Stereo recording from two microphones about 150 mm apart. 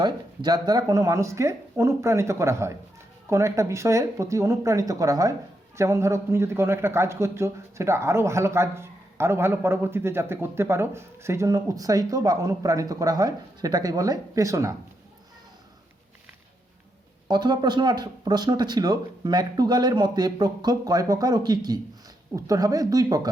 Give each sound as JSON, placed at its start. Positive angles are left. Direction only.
{"t": 0.0, "sound": "a man's voice", "side_deg": -30}
{"t": 17.2, "sound": "a man's voice", "side_deg": -30}